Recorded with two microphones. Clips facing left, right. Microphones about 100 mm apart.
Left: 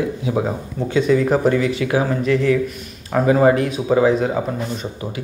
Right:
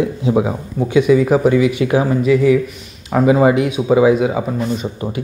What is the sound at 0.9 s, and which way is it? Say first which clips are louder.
Speech: right 4 dB; 10° right (ahead or behind).